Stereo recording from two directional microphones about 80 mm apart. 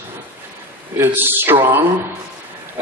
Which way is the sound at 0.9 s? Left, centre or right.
Right.